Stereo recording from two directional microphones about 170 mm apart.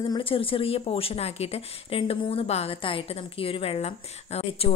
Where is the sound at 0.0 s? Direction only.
30° left (ahead or behind).